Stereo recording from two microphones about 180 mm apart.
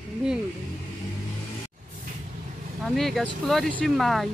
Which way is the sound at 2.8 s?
Centre (ahead or behind).